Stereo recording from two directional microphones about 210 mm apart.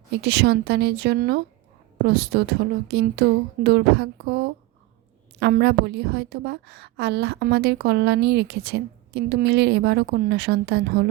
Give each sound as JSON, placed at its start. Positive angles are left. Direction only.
{"t": 0.1, "sound": "a woman's voice", "side_deg": -50}